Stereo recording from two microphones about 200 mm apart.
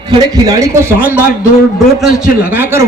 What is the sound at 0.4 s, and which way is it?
A man's voice, 15° right (ahead or behind).